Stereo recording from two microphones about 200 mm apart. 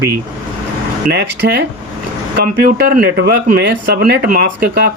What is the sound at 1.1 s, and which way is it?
Speech, 55° right (ahead or behind).